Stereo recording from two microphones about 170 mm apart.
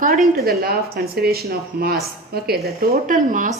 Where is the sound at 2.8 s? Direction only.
50° right (ahead or behind).